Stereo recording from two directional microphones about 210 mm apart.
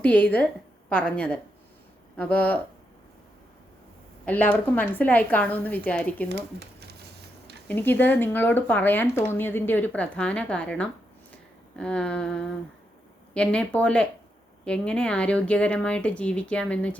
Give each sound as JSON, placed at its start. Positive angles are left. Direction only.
{"t": 0.0, "sound": "speech", "side_deg": 10}
{"t": 4.3, "sound": "speech", "side_deg": 5}
{"t": 6.2, "sound": "speech", "side_deg": -55}
{"t": 7.7, "sound": "speech", "side_deg": 10}